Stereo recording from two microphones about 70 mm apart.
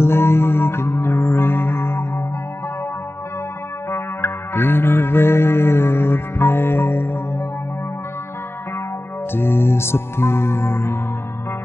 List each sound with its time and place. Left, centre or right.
0.0 s music: left
3.9 s music: left
9.3 s music: left